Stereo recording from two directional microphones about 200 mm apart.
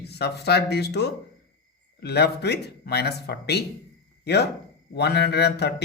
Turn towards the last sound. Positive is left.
turn(degrees=55)  # may be behind; listen again after turning